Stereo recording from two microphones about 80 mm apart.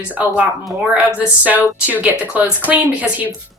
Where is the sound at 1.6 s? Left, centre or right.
Left.